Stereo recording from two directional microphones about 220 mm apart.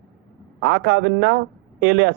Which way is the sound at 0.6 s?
50° right (ahead or behind).